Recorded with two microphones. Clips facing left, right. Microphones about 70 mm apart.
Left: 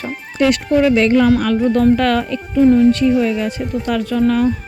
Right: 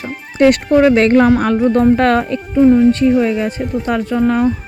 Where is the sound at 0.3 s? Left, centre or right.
Right.